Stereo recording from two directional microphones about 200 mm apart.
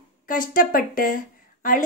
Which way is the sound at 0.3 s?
45° left (ahead or behind).